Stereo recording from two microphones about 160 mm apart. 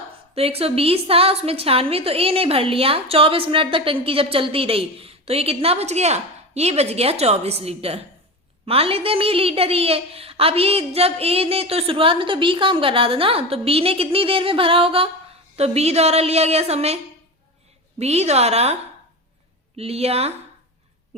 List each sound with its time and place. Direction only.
0.3 s a woman's voice: 40° right (ahead or behind)
18.0 s a woman's voice: 40° right (ahead or behind)